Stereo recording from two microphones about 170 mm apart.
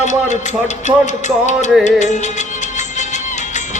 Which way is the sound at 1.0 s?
45° left (ahead or behind).